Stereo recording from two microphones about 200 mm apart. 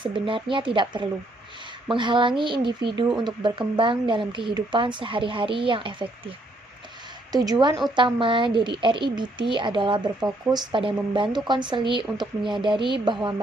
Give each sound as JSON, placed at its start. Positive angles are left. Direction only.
{"t": 0.0, "sound": "speech", "side_deg": -25}
{"t": 7.3, "sound": "speech", "side_deg": -20}